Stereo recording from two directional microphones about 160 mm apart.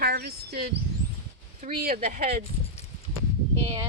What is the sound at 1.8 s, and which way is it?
Speech, 65° right (ahead or behind).